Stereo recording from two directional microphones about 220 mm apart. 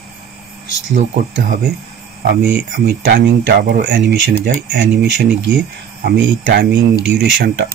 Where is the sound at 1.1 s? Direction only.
40° right (ahead or behind).